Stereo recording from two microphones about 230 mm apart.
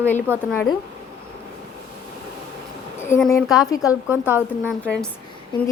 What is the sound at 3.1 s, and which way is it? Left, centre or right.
Speech, centre.